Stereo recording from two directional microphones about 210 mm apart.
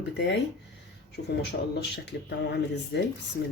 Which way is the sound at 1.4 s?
55° left (ahead or behind).